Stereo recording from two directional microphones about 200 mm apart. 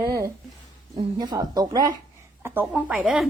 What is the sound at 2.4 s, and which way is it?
Speech, 10° right (ahead or behind).